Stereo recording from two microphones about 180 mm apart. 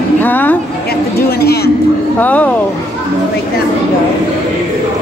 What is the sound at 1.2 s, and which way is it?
Speech, 60° left (ahead or behind).